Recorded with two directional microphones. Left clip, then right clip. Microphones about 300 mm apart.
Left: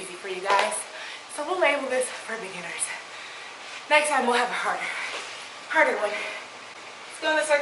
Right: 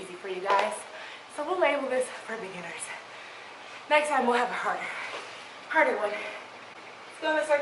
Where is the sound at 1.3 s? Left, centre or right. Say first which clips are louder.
Left 2 dB; right.